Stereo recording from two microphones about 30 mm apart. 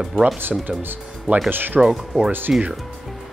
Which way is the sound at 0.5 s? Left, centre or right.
Centre.